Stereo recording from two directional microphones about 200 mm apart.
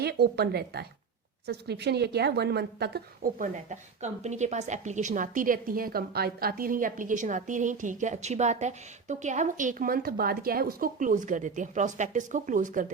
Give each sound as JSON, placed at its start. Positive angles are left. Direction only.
{"t": 0.0, "sound": "a woman's voice", "side_deg": -55}